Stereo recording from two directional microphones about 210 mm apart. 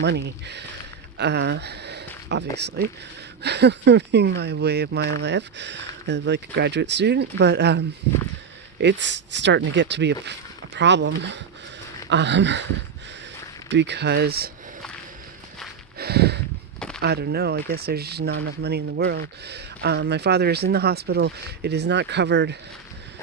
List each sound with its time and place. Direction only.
0.0 s speech: 55° right (ahead or behind)
13.7 s speech: 55° right (ahead or behind)
16.0 s a sound: 50° right (ahead or behind)
17.0 s speech: 50° right (ahead or behind)